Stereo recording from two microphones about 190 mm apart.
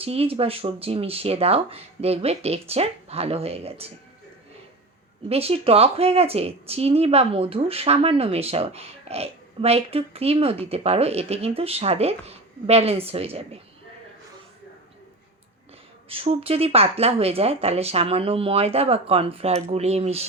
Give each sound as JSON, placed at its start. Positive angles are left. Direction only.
{"t": 0.0, "sound": "speech", "side_deg": -30}
{"t": 5.3, "sound": "speech", "side_deg": -30}
{"t": 16.0, "sound": "speech", "side_deg": -30}